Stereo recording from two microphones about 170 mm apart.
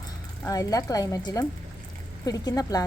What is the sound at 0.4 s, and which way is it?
A woman's voice, 20° left (ahead or behind).